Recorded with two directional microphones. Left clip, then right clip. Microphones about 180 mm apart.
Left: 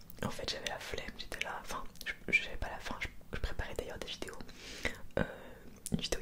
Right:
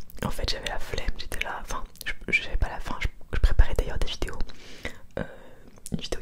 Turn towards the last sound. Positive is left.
turn(degrees=-25)  # may be behind; listen again after turning